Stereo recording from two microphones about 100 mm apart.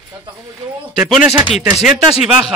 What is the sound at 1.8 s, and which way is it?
Speech, 5° right (ahead or behind).